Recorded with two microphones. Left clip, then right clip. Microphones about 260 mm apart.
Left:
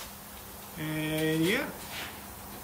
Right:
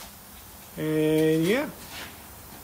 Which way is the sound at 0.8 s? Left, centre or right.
Centre.